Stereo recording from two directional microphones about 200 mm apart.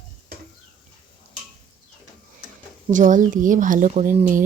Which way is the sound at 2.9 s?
40° right (ahead or behind).